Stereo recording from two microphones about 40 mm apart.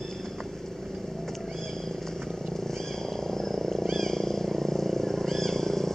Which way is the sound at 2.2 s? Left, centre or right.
Centre.